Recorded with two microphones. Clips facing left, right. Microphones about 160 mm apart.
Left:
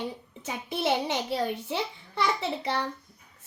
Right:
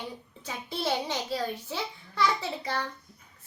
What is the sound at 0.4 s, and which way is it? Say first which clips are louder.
A child's voice: left 3 dB; 20° left (ahead or behind).